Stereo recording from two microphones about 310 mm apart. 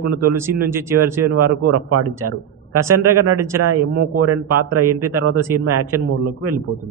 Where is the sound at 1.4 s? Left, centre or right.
Right.